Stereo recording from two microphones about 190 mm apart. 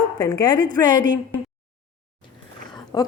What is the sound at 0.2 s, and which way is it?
Speech, 20° left (ahead or behind).